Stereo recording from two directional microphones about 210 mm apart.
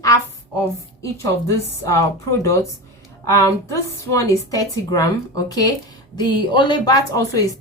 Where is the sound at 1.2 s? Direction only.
15° left (ahead or behind).